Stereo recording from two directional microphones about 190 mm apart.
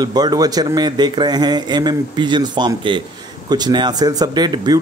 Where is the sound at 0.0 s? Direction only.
20° right (ahead or behind).